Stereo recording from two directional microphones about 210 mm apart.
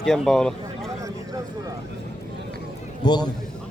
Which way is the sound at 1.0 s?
15° right (ahead or behind).